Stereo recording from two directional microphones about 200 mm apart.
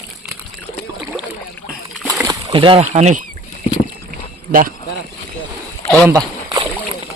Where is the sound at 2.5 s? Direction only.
25° right (ahead or behind).